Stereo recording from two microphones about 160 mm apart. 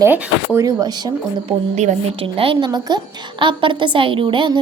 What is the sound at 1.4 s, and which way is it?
A woman's voice, 40° right (ahead or behind).